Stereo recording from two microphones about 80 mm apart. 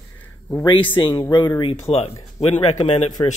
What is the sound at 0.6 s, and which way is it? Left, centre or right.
Speech, left.